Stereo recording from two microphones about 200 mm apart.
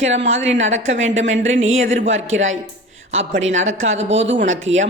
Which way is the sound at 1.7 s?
75° right (ahead or behind).